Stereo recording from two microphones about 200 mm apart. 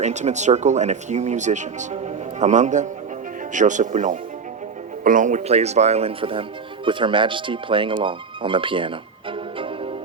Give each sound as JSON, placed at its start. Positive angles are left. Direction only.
{"t": 0.0, "sound": "speech", "side_deg": -35}
{"t": 8.0, "sound": "music", "side_deg": -25}